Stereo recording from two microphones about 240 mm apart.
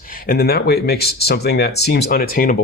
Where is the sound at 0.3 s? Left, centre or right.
Left.